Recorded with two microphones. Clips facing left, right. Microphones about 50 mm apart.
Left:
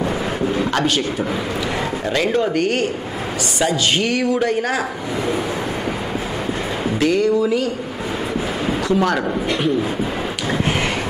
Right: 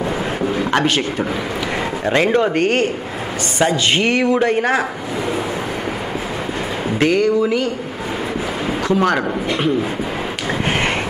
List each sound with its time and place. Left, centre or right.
0.6 s a sound: right
2.0 s speech: right
7.0 s speech: right
8.8 s speech: right